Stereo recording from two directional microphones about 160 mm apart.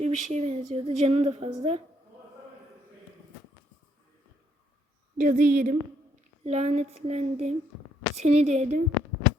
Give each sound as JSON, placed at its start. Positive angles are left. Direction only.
{"t": 0.0, "sound": "a woman's voice", "side_deg": -45}
{"t": 5.1, "sound": "a woman's voice", "side_deg": -55}
{"t": 6.4, "sound": "a woman's voice", "side_deg": -40}